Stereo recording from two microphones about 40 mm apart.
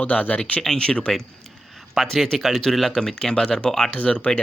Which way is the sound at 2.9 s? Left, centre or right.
Centre.